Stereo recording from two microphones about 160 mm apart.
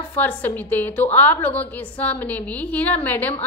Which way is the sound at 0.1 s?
10° left (ahead or behind).